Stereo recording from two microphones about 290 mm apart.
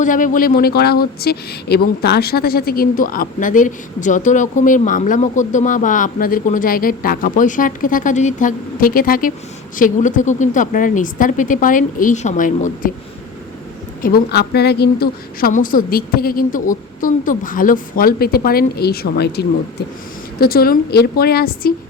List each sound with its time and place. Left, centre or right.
0.0 s speech: left
14.0 s a woman's voice: left